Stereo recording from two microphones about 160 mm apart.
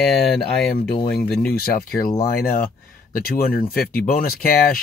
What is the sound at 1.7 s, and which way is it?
Speech, 65° left (ahead or behind).